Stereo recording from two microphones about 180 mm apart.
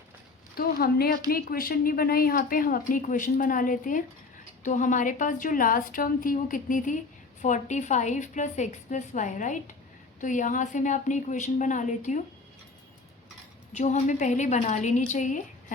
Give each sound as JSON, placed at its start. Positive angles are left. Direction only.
{"t": 0.5, "sound": "a woman's voice", "side_deg": 55}
{"t": 13.7, "sound": "a woman's voice", "side_deg": 40}